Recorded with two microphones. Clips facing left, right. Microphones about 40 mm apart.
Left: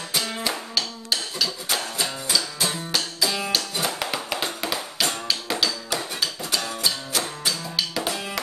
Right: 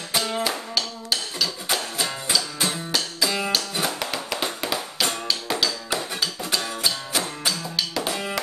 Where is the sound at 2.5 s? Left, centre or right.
Centre.